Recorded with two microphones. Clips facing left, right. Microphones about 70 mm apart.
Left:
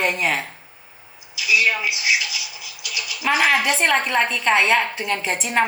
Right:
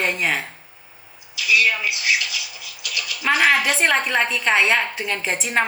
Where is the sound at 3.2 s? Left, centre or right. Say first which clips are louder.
Even; centre.